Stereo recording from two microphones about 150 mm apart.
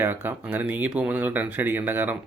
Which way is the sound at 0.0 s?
15° right (ahead or behind).